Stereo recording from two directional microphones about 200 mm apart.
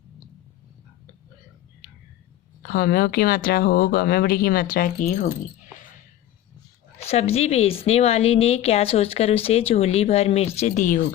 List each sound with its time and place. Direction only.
2.6 s speech: 50° left (ahead or behind)
7.0 s a woman's voice: 30° left (ahead or behind)